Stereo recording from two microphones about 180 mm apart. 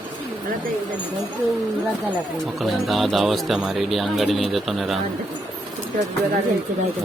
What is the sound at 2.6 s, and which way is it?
Speech, centre (ahead or behind).